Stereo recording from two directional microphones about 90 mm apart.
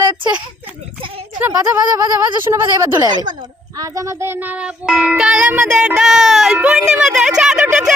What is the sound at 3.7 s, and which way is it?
Speech, 40° right (ahead or behind).